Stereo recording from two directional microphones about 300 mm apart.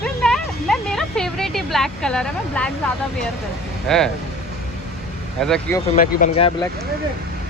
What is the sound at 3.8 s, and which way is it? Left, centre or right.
Speech, centre.